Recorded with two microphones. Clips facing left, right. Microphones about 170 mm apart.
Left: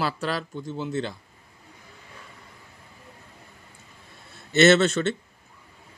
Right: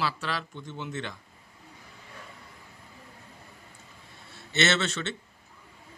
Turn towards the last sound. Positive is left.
turn(degrees=45)  # may be behind; listen again after turning